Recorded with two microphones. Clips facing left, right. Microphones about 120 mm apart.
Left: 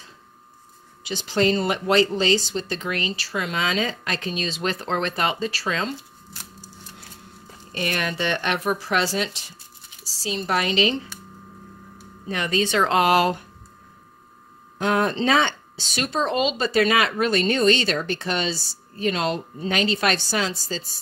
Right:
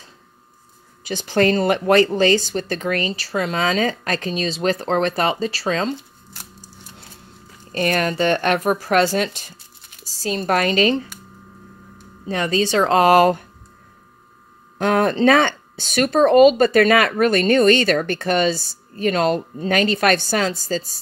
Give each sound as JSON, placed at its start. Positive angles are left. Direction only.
{"t": 1.0, "sound": "speech", "side_deg": -50}
{"t": 7.7, "sound": "speech", "side_deg": -40}
{"t": 12.3, "sound": "speech", "side_deg": -35}
{"t": 14.8, "sound": "speech", "side_deg": -55}